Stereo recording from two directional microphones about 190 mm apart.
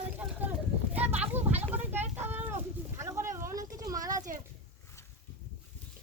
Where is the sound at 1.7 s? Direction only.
10° right (ahead or behind).